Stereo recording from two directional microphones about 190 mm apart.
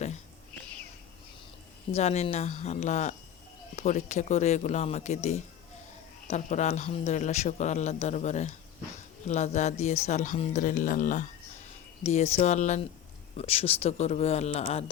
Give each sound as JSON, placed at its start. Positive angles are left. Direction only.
{"t": 1.9, "sound": "a man's voice", "side_deg": 35}